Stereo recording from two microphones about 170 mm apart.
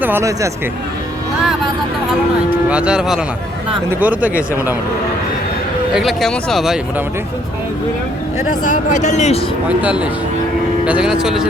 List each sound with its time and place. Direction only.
0.0 s speech: 15° right (ahead or behind)
2.6 s speech: 5° right (ahead or behind)
5.9 s speech: centre (ahead or behind)
8.6 s speech: 50° left (ahead or behind)
9.6 s speech: 5° right (ahead or behind)